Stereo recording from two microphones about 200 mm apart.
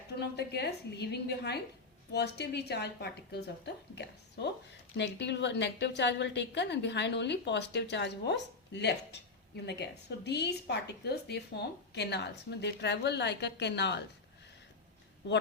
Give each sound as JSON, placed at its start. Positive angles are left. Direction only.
{"t": 0.2, "sound": "a woman's voice", "side_deg": 55}
{"t": 15.2, "sound": "a woman's voice", "side_deg": 60}